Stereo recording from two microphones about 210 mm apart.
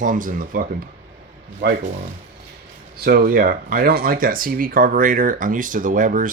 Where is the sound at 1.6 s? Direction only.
55° right (ahead or behind).